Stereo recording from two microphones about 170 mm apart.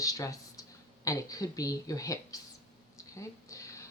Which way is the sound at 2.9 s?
20° left (ahead or behind).